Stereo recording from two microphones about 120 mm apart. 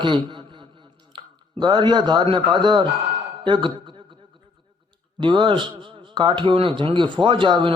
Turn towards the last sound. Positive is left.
turn(degrees=-40)  # may be behind; listen again after turning